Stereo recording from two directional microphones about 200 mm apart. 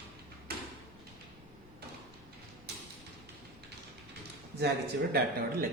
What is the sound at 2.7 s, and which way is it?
Mechanisms, 55° right (ahead or behind).